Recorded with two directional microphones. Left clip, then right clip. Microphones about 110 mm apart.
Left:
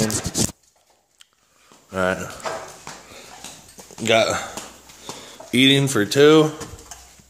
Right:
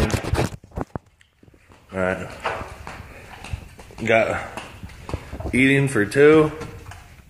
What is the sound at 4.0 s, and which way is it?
Speech, 50° left (ahead or behind).